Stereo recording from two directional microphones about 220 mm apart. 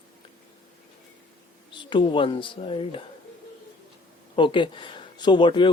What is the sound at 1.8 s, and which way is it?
Speech, 20° left (ahead or behind).